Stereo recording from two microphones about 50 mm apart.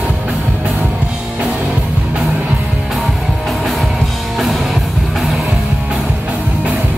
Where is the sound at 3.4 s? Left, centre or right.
Centre.